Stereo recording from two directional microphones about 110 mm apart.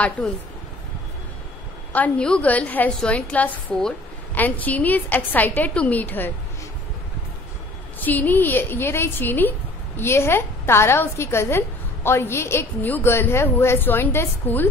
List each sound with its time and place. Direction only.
1.9 s a woman's voice: 10° left (ahead or behind)
8.0 s a woman's voice: 15° left (ahead or behind)